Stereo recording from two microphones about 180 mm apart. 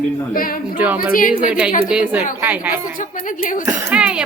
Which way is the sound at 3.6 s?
5° right (ahead or behind).